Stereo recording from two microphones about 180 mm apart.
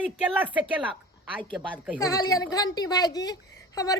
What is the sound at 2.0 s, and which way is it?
A woman's voice, 20° left (ahead or behind).